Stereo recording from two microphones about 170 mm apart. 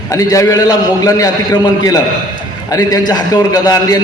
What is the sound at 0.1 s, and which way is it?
A man's voice, 20° left (ahead or behind).